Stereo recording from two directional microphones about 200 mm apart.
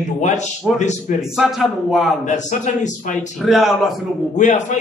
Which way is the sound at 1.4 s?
Centre (ahead or behind).